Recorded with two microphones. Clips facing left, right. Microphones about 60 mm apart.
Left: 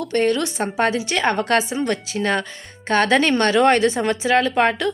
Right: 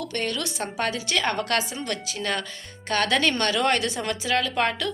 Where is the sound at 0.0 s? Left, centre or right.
Left.